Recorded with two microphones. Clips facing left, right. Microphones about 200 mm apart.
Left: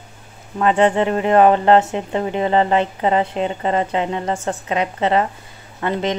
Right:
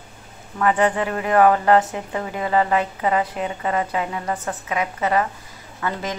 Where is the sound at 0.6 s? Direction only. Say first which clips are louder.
Left 4 dB; 25° left (ahead or behind).